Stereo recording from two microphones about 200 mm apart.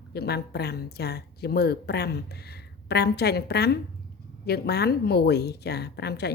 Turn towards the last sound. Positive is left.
turn(degrees=55)  # may be behind; listen again after turning